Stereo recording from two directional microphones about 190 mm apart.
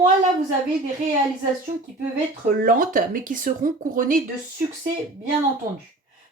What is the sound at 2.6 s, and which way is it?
Speech, 45° right (ahead or behind).